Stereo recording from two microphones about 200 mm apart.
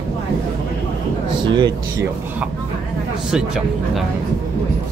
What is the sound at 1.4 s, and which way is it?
Speech, 25° right (ahead or behind).